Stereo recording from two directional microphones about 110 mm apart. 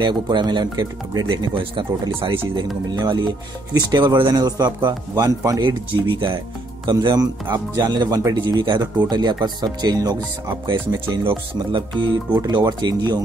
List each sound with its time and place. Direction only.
0.0 s speech: 45° right (ahead or behind)
3.0 s speech: 40° right (ahead or behind)
6.9 s speech: 40° right (ahead or behind)